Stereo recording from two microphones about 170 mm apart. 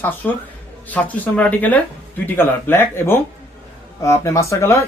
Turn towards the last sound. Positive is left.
turn(degrees=15)  # may be behind; listen again after turning